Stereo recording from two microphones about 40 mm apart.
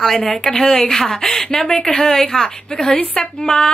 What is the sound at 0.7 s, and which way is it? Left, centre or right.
Speech, left.